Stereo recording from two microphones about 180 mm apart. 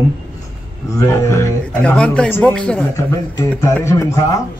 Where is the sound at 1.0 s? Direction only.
15° left (ahead or behind).